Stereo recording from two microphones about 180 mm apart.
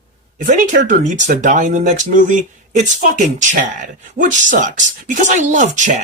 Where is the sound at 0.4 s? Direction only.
45° right (ahead or behind).